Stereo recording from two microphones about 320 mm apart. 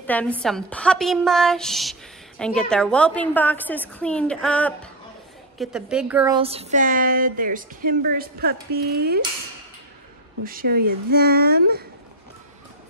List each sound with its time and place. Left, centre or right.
0.0 s a woman's voice: centre; by 9.2 s right
10.4 s a woman's voice: right